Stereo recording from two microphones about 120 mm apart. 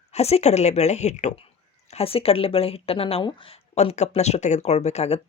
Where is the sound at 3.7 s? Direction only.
70° left (ahead or behind).